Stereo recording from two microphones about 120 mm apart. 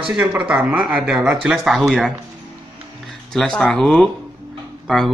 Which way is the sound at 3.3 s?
5° left (ahead or behind).